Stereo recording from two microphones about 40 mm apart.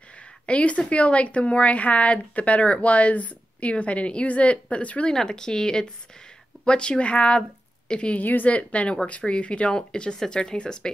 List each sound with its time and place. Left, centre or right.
0.5 s speech: left
5.1 s speech: centre
8.2 s a woman's voice: left
8.5 s speech: left